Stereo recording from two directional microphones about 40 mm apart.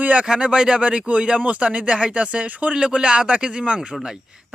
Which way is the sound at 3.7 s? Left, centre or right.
Centre.